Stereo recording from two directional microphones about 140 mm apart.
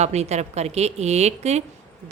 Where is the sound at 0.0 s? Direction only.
50° right (ahead or behind).